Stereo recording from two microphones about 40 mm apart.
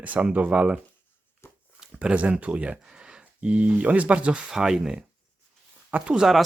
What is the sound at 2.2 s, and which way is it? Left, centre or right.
Speech, right.